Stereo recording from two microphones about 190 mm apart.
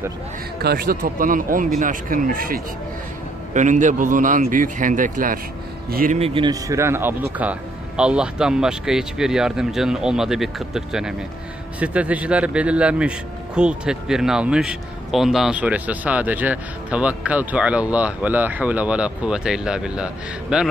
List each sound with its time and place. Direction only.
0.6 s speech: 55° right (ahead or behind)
6.1 s a man's voice: 30° right (ahead or behind); by 20.7 s 5° right (ahead or behind)